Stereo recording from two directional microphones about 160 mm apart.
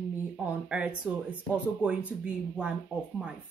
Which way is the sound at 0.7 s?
5° right (ahead or behind).